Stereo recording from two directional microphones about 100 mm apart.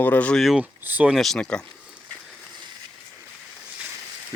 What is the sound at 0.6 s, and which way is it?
Speech, 15° right (ahead or behind).